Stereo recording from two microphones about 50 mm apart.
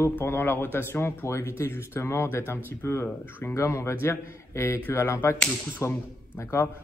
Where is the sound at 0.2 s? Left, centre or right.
Left.